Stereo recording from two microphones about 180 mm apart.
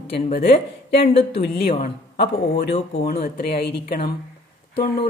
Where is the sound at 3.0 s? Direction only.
60° left (ahead or behind).